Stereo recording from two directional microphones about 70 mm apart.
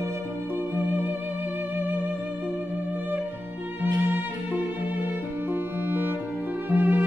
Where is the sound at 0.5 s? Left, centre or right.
Right.